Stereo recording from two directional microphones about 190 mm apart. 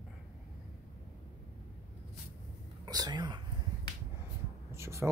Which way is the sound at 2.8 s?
20° right (ahead or behind).